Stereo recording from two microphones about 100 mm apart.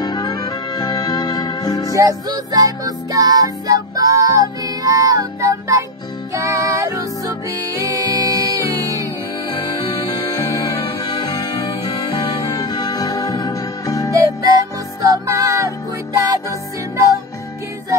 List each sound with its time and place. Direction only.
0.0 s music: 45° left (ahead or behind)
2.0 s music: 35° right (ahead or behind)
9.5 s music: 55° left (ahead or behind); by 14.1 s 35° left (ahead or behind)
14.1 s music: 35° right (ahead or behind)